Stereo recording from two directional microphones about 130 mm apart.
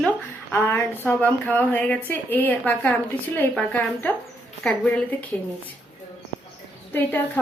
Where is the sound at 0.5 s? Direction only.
15° left (ahead or behind).